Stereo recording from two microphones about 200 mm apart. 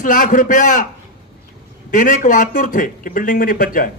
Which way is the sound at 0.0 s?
40° left (ahead or behind).